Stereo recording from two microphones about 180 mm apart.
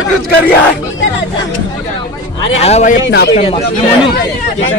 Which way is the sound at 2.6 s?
35° left (ahead or behind).